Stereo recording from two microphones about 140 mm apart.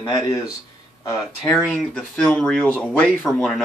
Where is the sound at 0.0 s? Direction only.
25° left (ahead or behind).